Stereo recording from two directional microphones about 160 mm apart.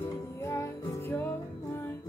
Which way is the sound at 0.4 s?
20° left (ahead or behind).